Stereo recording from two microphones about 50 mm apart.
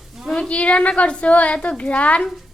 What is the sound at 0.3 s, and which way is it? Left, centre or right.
A woman's voice, left.